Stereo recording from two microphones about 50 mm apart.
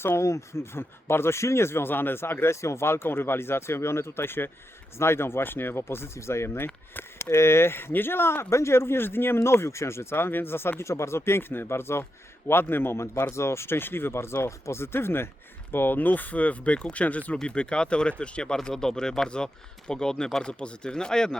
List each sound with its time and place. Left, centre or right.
0.1 s speech: left
2.6 s speech: left
6.1 s a man's voice: left
14.9 s a man's voice: left
17.3 s speech: centre